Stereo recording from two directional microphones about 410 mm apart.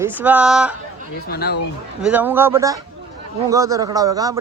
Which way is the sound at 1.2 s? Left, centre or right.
Left.